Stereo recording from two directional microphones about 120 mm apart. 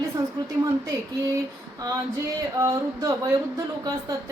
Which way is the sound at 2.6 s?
25° right (ahead or behind).